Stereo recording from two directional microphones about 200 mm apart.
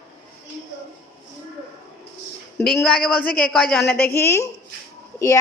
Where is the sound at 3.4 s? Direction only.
5° left (ahead or behind).